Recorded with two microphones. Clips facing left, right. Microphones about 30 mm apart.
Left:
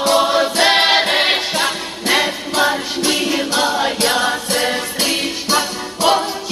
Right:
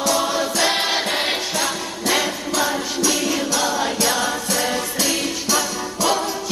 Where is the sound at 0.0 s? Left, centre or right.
Left.